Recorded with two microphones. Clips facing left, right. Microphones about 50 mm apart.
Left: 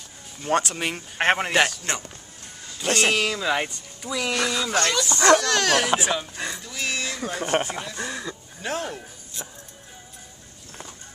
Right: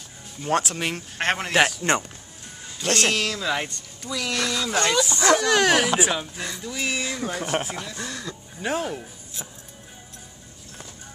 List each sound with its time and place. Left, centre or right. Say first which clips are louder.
0.4 s speech: even; centre
1.1 s speech: left 5 dB; centre
1.5 s speech: right 1 dB; centre
1.8 s speech: right 7 dB; right
2.8 s speech: left 1 dB; centre
4.7 s speech: right 2 dB; centre
8.5 s speech: right 3 dB; centre